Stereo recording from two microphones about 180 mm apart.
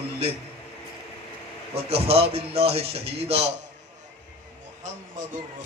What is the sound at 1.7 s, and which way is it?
A man's voice, 35° right (ahead or behind).